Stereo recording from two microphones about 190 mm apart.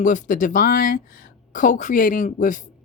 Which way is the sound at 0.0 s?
40° left (ahead or behind).